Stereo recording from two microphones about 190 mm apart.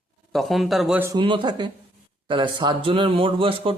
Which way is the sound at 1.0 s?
25° right (ahead or behind).